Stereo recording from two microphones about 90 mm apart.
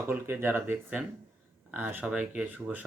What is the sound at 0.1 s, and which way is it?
Speech, 20° right (ahead or behind).